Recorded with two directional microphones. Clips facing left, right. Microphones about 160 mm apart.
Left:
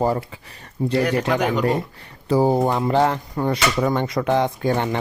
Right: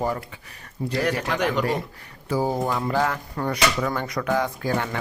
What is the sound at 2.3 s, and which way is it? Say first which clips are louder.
Speech: left 6 dB; 30° left (ahead or behind).